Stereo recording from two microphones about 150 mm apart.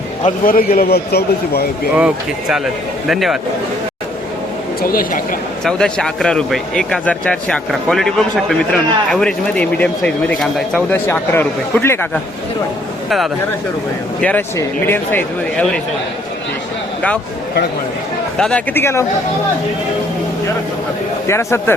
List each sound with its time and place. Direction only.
0.4 s a man's voice: 70° left (ahead or behind); by 1.6 s 90° left
2.0 s speech: 5° right (ahead or behind)
4.8 s a woman's voice: 75° left (ahead or behind)
5.6 s speech: 5° left (ahead or behind)
13.1 s speech: centre (ahead or behind)
14.2 s speech: 10° left (ahead or behind)
18.3 s speech: 5° left (ahead or behind)
21.2 s speech: 15° left (ahead or behind)